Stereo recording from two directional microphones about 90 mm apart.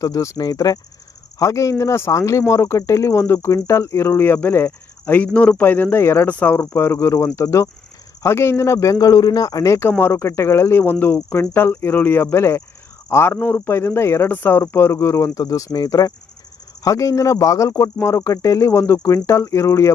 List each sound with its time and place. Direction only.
0.0 s speech: 35° left (ahead or behind)